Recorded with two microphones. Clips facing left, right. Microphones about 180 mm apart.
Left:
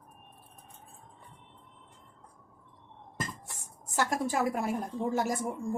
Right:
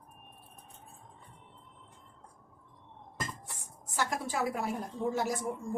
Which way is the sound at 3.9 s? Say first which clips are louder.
Left 4 dB; 45° left (ahead or behind).